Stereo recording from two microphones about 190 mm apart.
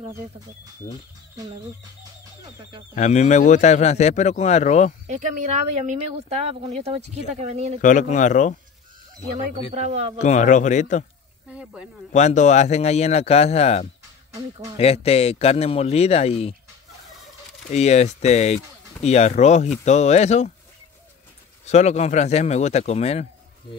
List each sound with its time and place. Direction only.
2.9 s speech: 40° left (ahead or behind)
5.0 s speech: 40° right (ahead or behind)
7.8 s speech: 40° left (ahead or behind)
9.7 s speech: 35° right (ahead or behind)
10.1 s speech: 40° left (ahead or behind)
11.5 s speech: 5° right (ahead or behind)
12.1 s speech: 40° left (ahead or behind)
14.3 s speech: 15° right (ahead or behind)
14.8 s speech: 30° left (ahead or behind)
17.6 s speech: 35° left (ahead or behind)
21.6 s speech: 35° left (ahead or behind)